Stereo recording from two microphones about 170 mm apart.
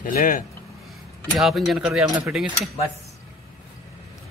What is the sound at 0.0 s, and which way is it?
Speech, 55° left (ahead or behind).